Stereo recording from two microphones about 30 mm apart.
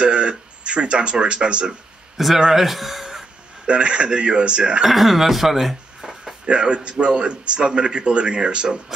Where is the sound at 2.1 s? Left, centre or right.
Centre.